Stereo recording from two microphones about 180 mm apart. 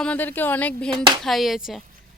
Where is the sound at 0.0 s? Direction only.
10° left (ahead or behind).